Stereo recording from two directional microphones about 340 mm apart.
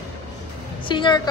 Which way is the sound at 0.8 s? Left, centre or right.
Centre.